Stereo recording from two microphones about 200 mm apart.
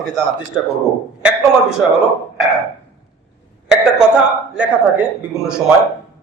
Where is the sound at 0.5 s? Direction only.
Centre (ahead or behind).